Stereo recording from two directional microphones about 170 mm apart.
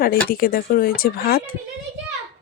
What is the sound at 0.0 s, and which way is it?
Speech, 60° left (ahead or behind).